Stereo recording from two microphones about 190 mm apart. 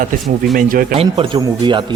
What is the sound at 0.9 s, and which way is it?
Speech, 30° right (ahead or behind).